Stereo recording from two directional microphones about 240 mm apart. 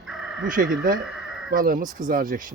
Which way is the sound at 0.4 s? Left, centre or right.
Right.